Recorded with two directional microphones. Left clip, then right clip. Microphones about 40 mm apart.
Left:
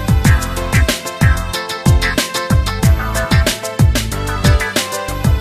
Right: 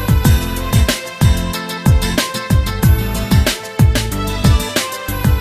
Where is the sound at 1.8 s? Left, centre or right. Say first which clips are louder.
Left 1 dB; right.